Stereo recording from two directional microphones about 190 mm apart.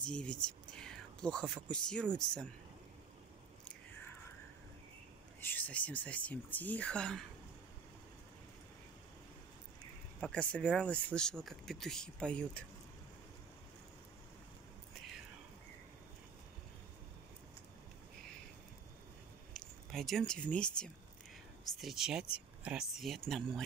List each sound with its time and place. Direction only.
0.0 s speech: 5° left (ahead or behind)
5.4 s speech: 10° left (ahead or behind)
10.2 s speech: 5° left (ahead or behind)
19.9 s speech: centre (ahead or behind)